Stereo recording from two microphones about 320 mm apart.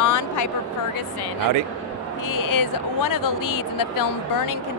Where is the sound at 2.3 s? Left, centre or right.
Left.